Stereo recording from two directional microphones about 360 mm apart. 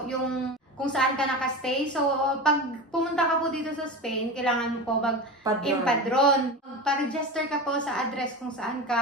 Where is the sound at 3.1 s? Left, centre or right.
Centre.